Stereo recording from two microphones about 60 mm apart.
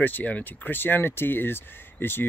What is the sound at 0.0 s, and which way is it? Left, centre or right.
Speech, left.